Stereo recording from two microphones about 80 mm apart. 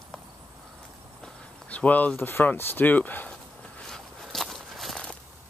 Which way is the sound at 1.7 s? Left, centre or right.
Centre.